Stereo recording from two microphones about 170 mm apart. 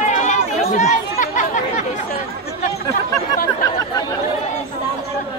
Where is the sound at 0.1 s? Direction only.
45° left (ahead or behind).